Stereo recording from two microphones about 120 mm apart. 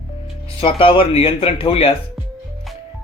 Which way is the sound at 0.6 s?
50° left (ahead or behind).